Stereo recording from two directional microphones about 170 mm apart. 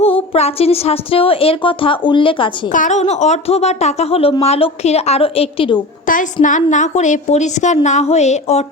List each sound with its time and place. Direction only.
0.0 s a woman's voice: 35° left (ahead or behind)
2.7 s a woman's voice: 45° left (ahead or behind)
6.1 s a woman's voice: 50° left (ahead or behind)